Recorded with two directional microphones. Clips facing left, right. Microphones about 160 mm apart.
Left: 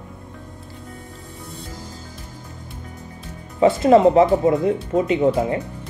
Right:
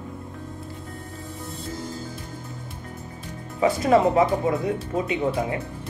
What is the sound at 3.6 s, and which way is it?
Speech, 25° left (ahead or behind).